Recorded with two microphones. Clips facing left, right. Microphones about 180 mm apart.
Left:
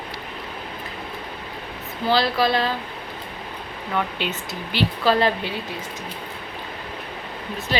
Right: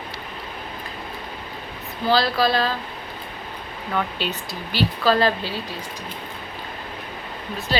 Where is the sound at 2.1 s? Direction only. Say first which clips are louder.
Even; 20° left (ahead or behind).